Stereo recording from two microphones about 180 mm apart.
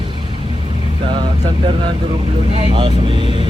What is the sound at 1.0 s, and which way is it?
Speech, 25° right (ahead or behind).